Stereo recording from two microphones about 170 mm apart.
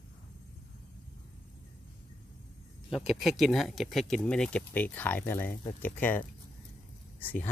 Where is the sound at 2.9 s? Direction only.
Centre (ahead or behind).